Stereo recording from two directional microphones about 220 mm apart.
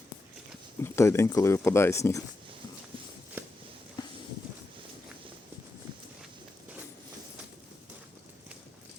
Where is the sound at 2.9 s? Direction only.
25° right (ahead or behind).